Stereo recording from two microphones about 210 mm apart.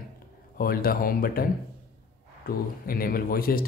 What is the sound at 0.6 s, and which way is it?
Speech, 45° left (ahead or behind).